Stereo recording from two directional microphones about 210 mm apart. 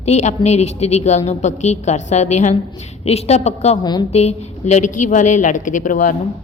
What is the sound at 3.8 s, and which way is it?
Speech, 20° left (ahead or behind).